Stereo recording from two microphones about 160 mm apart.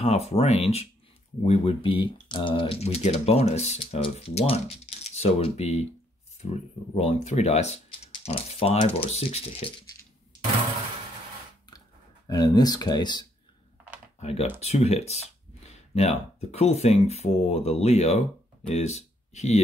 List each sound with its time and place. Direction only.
0.0 s speech: 40° left (ahead or behind)
6.9 s speech: 45° left (ahead or behind)
12.3 s speech: 25° left (ahead or behind)
14.2 s speech: 40° left (ahead or behind)